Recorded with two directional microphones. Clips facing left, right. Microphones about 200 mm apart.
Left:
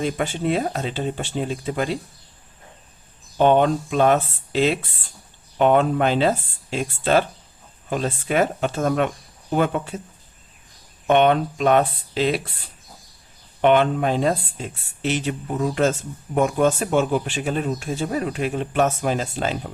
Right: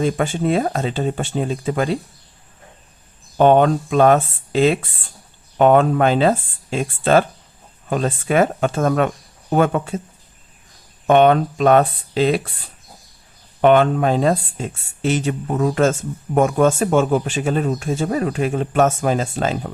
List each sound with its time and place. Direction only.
0.2 s speech: 50° right (ahead or behind)
3.3 s speech: 45° right (ahead or behind)
7.9 s speech: 50° right (ahead or behind)
11.1 s speech: 40° right (ahead or behind)
13.6 s speech: 45° right (ahead or behind)